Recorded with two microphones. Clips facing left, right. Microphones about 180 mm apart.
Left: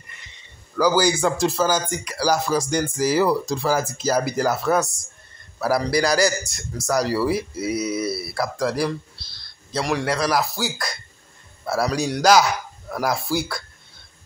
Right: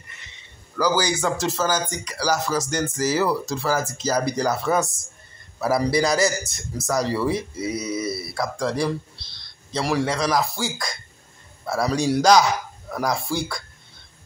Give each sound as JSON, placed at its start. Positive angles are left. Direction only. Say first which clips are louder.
{"t": 0.7, "sound": "a man's voice", "louder": "left 3 dB", "side_deg": 10}
{"t": 7.7, "sound": "speech", "louder": "left 3 dB", "side_deg": -20}
{"t": 8.4, "sound": "a man's voice", "louder": "left 1 dB", "side_deg": 5}